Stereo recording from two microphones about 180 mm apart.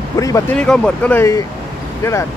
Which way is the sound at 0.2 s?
20° left (ahead or behind).